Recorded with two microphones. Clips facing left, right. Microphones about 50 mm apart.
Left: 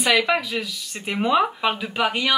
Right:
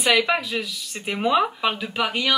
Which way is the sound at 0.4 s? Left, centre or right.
Centre.